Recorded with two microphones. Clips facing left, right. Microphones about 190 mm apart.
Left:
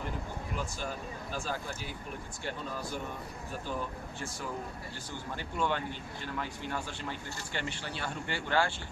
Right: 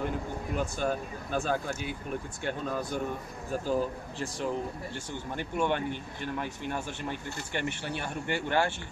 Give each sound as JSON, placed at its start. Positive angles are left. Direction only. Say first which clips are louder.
{"t": 0.6, "sound": "speech", "louder": "right 9 dB", "side_deg": -55}
{"t": 3.6, "sound": "speech", "louder": "right 8 dB", "side_deg": -35}
{"t": 5.3, "sound": "speech", "louder": "right 4 dB", "side_deg": -20}